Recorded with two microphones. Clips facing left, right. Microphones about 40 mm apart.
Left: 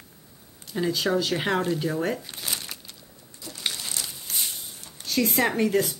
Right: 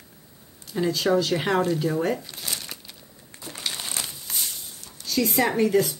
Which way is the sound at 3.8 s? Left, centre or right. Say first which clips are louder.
Right 2 dB; right.